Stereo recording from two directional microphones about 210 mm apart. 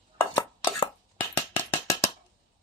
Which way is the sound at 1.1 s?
10° left (ahead or behind).